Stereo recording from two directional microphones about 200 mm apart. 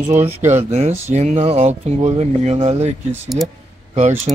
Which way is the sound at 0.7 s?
35° right (ahead or behind).